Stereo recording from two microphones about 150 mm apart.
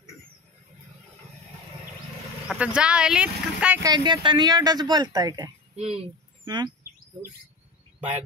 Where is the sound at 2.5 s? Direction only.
5° right (ahead or behind).